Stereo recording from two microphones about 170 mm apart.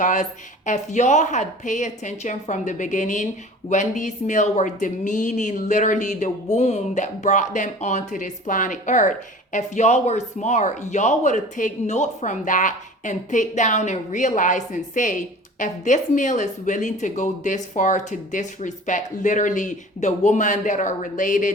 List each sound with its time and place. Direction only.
0.0 s speech: 45° left (ahead or behind)